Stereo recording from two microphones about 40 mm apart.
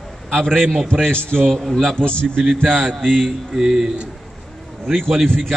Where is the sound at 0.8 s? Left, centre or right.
Centre.